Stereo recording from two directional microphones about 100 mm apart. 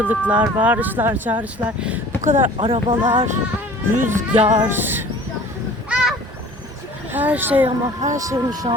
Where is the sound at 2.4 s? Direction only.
60° right (ahead or behind).